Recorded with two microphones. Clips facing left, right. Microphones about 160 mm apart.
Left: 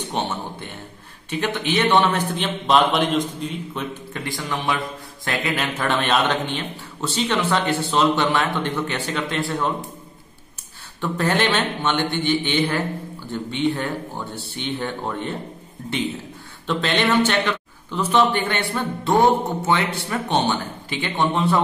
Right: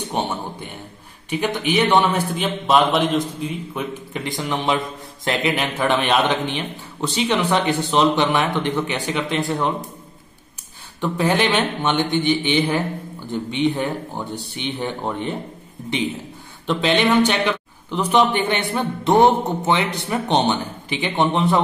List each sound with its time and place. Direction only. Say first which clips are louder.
0.1 s a man's voice: right 2 dB; 15° right (ahead or behind)
3.7 s a man's voice: right 2 dB; 20° right (ahead or behind)
11.0 s a man's voice: right 2 dB; 15° right (ahead or behind)
16.6 s a man's voice: right 3 dB; 15° right (ahead or behind)